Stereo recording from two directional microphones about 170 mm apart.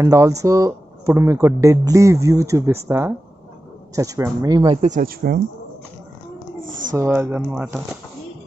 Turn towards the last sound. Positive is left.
turn(degrees=-10)  # may be behind; listen again after turning